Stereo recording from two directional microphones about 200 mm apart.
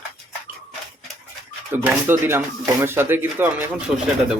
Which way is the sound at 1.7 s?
10° right (ahead or behind).